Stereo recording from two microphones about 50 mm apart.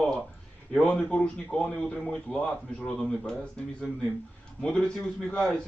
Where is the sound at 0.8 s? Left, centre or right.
Centre.